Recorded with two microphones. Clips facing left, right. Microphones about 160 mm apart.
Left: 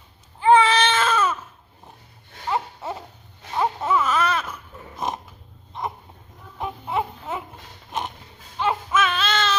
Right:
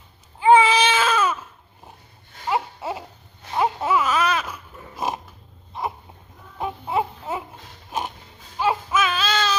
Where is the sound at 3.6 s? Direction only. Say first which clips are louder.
Right 1 dB; 10° right (ahead or behind).